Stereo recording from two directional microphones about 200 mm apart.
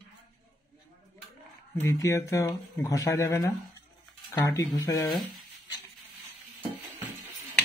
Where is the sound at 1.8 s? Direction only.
15° left (ahead or behind).